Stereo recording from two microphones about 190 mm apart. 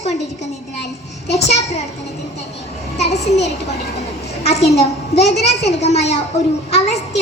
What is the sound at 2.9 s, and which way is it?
Speech, 35° left (ahead or behind).